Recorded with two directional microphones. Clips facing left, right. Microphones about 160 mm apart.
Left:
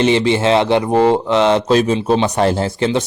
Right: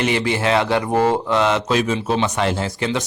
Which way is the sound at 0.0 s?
25° left (ahead or behind).